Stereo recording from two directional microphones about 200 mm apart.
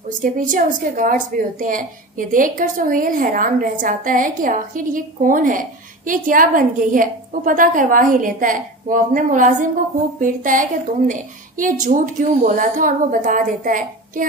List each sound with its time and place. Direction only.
0.2 s a woman's voice: 40° right (ahead or behind)